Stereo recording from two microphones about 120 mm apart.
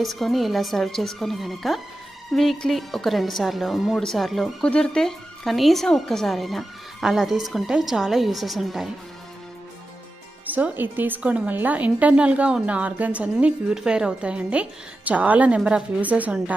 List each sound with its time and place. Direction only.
0.0 s speech: centre (ahead or behind)
10.4 s a woman's voice: 15° right (ahead or behind)